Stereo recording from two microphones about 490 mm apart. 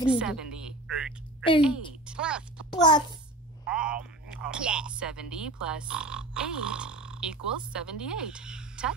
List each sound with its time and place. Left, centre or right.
0.2 s speech: centre
2.7 s a child's voice: centre
3.7 s speech: centre